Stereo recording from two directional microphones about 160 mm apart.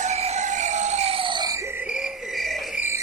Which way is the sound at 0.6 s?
45° right (ahead or behind).